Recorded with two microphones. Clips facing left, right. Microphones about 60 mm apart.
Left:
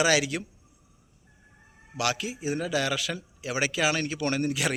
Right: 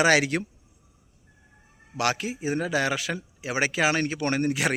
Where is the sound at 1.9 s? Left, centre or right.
Right.